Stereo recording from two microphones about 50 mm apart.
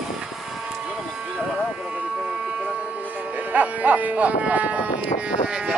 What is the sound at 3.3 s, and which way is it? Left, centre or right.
Livestock, right.